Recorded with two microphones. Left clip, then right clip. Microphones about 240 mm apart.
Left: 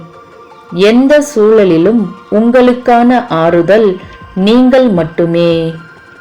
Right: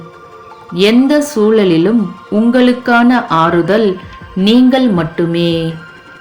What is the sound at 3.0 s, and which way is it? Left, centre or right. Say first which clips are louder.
Speech: left 1 dB; right.